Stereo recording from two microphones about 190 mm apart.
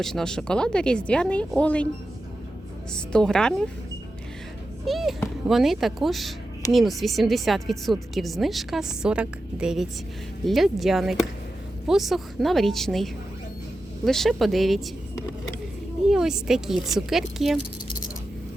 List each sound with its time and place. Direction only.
0.0 s speech: 5° left (ahead or behind)
2.9 s speech: 5° left (ahead or behind)
4.9 s speech: centre (ahead or behind)
16.0 s speech: 5° right (ahead or behind)